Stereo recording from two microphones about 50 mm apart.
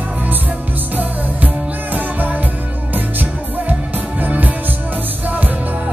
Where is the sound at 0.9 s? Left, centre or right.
Right.